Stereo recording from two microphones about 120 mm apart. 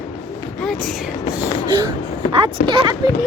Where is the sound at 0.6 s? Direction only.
5° left (ahead or behind).